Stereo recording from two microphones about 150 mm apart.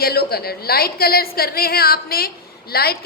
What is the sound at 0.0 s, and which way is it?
A woman's voice, 90° left.